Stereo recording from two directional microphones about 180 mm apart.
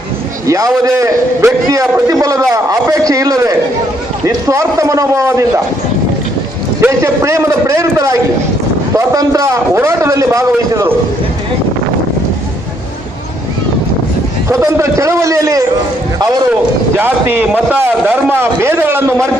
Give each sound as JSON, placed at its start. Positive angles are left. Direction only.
{"t": 0.4, "sound": "a man's voice", "side_deg": -15}
{"t": 6.8, "sound": "a man's voice", "side_deg": -15}
{"t": 14.5, "sound": "a man's voice", "side_deg": -15}
{"t": 17.0, "sound": "a man's voice", "side_deg": -10}